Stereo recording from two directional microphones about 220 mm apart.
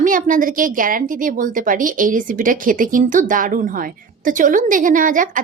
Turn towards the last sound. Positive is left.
turn(degrees=-35)  # may be behind; listen again after turning